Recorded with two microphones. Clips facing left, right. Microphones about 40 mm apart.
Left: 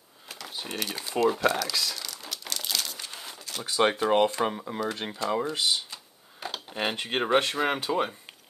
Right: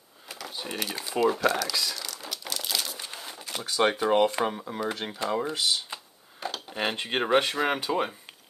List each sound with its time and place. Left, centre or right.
0.3 s crumpling: centre
3.3 s a sound: right
3.6 s speech: centre